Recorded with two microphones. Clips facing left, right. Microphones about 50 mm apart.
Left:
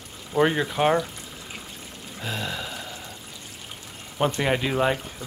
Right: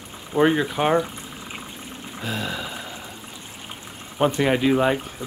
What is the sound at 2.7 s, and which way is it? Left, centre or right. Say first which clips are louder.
Pour: right 2 dB; centre.